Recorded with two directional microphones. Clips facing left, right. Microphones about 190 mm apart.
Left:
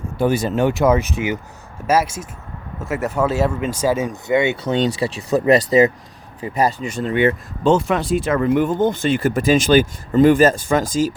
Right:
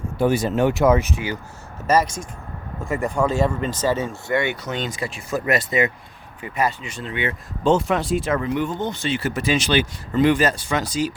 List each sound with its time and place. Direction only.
0.2 s speech: 30° left (ahead or behind)
1.9 s speech: 5° left (ahead or behind); by 11.1 s 45° left (ahead or behind)